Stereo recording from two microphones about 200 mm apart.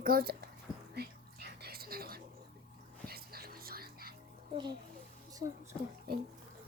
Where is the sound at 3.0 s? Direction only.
50° right (ahead or behind).